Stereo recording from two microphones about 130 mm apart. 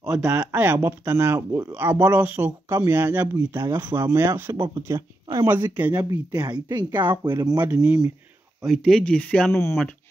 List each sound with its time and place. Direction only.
0.1 s speech: 10° right (ahead or behind)
4.9 s speech: 35° right (ahead or behind)
7.0 s speech: 15° right (ahead or behind)
8.6 s speech: centre (ahead or behind)
9.5 s speech: 20° left (ahead or behind)